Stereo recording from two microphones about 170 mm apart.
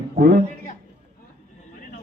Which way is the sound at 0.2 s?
70° right (ahead or behind).